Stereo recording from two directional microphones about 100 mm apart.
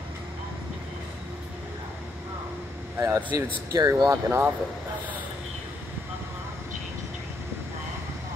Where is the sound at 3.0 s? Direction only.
20° right (ahead or behind).